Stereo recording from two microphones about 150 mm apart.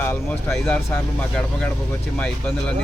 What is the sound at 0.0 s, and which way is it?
Speech, 15° left (ahead or behind).